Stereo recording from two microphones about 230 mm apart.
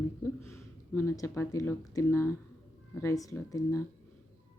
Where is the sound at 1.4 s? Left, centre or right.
Centre.